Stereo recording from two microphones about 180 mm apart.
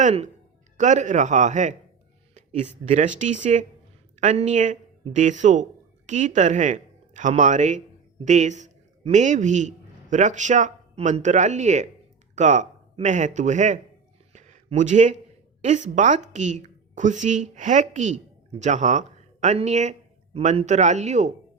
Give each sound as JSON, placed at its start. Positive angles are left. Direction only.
{"t": 0.0, "sound": "a man's voice", "side_deg": -35}
{"t": 14.3, "sound": "a sound", "side_deg": -40}
{"t": 15.6, "sound": "a woman's voice", "side_deg": -40}